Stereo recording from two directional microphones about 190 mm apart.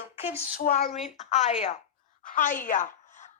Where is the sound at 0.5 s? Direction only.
50° left (ahead or behind).